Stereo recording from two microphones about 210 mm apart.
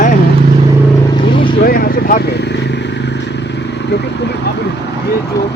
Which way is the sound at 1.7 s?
45° left (ahead or behind).